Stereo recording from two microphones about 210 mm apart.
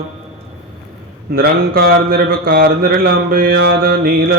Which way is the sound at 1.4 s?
45° right (ahead or behind).